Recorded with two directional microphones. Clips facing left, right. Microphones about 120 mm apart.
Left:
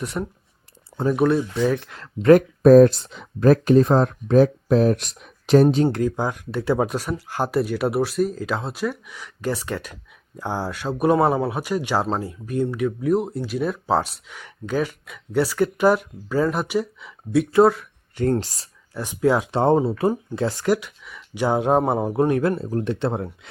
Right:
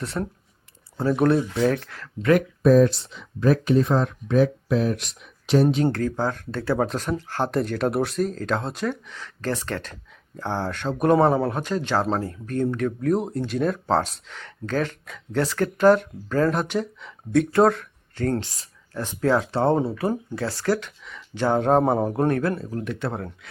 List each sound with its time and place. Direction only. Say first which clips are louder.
0.0 s speech: left 1 dB; 15° left (ahead or behind)
1.8 s speech: left 2 dB; 20° left (ahead or behind)
2.2 s speech: left 5 dB; 40° left (ahead or behind)
5.6 s speech: left 3 dB; 30° left (ahead or behind)
5.9 s speech: left 2 dB; 15° left (ahead or behind)
18.1 s speech: left 4 dB; 15° left (ahead or behind)
18.3 s speech: left 3 dB; 35° left (ahead or behind)
18.9 s speech: left 2 dB; 10° left (ahead or behind)
22.4 s speech: left 4 dB; 25° left (ahead or behind)